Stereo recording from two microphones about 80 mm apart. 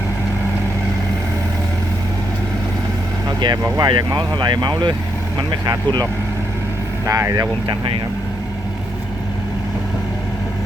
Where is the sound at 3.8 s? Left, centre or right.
Right.